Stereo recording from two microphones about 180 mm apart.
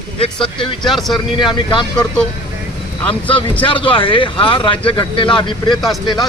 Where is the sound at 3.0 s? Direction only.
5° left (ahead or behind).